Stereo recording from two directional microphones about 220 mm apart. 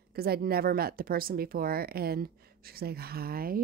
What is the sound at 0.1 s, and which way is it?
A woman's voice, 45° right (ahead or behind).